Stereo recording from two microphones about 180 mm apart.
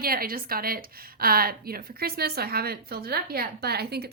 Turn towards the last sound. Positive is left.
turn(degrees=-60)  # may be behind; listen again after turning